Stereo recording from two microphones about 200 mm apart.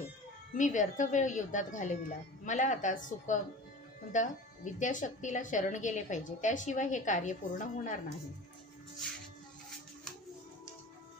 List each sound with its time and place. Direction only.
0.6 s speech: 40° left (ahead or behind)